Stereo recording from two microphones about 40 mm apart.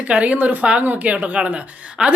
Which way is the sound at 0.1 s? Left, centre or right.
Right.